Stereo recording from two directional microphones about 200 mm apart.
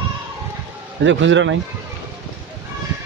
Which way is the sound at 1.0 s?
65° right (ahead or behind).